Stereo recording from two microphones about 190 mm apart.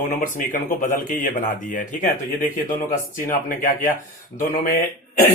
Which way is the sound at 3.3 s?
45° left (ahead or behind).